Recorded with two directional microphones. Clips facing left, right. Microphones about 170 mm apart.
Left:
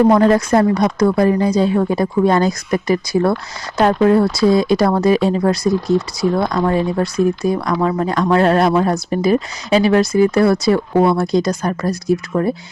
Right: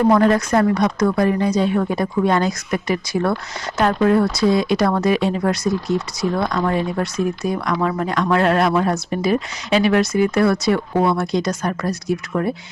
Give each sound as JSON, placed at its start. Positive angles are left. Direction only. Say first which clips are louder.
{"t": 0.1, "sound": "speech", "louder": "left 3 dB", "side_deg": 25}